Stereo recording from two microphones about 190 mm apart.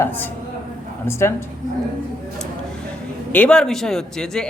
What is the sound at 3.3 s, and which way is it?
Speech, 5° left (ahead or behind).